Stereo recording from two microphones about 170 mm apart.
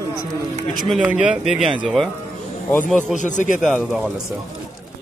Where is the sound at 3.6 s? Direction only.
Centre (ahead or behind).